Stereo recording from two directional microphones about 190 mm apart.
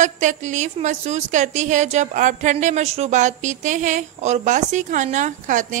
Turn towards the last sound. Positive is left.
turn(degrees=-40)  # may be behind; listen again after turning